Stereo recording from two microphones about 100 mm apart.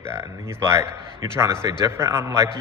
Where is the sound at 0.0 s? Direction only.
25° right (ahead or behind).